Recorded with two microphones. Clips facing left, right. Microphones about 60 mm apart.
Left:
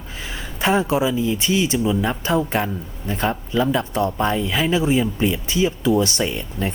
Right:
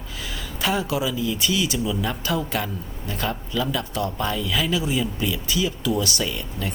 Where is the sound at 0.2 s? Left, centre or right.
Left.